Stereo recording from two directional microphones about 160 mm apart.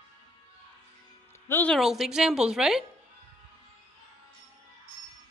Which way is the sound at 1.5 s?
10° left (ahead or behind).